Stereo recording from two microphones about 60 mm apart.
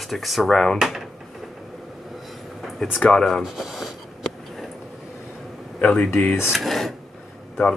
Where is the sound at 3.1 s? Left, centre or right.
Centre.